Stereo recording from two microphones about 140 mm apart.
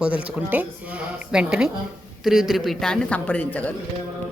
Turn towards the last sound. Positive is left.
turn(degrees=10)  # may be behind; listen again after turning